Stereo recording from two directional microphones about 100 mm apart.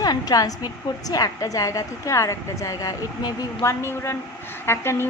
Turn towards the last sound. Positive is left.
turn(degrees=25)  # may be behind; listen again after turning